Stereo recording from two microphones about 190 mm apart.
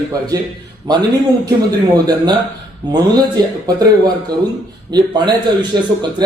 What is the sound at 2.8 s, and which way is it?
Speech, 20° right (ahead or behind).